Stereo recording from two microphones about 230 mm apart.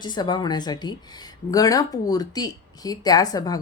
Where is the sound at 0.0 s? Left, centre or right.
Centre.